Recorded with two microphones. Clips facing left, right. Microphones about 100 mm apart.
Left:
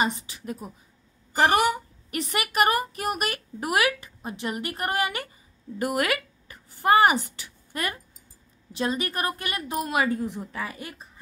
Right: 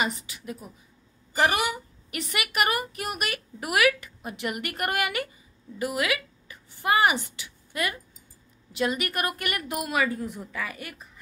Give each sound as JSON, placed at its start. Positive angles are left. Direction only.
{"t": 0.0, "sound": "a woman's voice", "side_deg": 35}
{"t": 5.8, "sound": "a woman's voice", "side_deg": 45}